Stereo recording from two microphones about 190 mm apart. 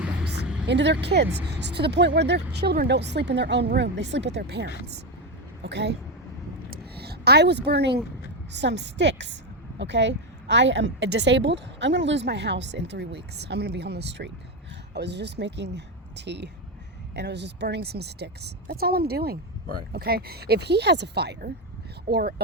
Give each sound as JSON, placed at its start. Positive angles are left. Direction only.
{"t": 0.7, "sound": "a woman's voice", "side_deg": -65}
{"t": 6.7, "sound": "a sound", "side_deg": -55}
{"t": 8.5, "sound": "a woman's voice", "side_deg": -65}